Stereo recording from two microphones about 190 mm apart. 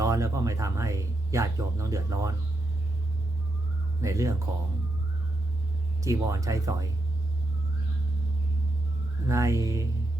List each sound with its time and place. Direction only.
0.0 s speech: 15° right (ahead or behind)
4.0 s speech: 15° right (ahead or behind)
6.0 s speech: 15° right (ahead or behind)
9.2 s speech: 15° right (ahead or behind)